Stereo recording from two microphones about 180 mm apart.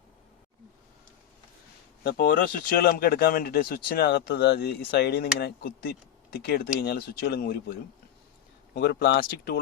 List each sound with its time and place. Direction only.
2.0 s speech: 55° left (ahead or behind)